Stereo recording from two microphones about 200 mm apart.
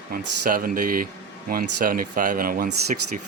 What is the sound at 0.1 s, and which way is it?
Speech, 45° right (ahead or behind).